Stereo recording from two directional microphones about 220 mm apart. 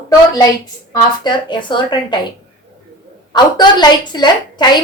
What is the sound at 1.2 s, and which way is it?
Speech, 20° left (ahead or behind).